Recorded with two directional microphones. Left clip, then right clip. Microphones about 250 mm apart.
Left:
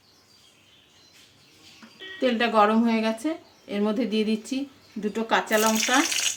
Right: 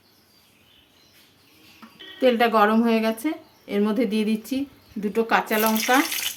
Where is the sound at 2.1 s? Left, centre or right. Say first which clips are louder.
Right 3 dB; centre.